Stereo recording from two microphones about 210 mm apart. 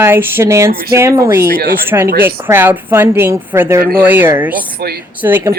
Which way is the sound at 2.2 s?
10° right (ahead or behind).